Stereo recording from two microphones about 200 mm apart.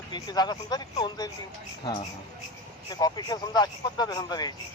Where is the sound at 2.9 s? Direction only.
20° left (ahead or behind).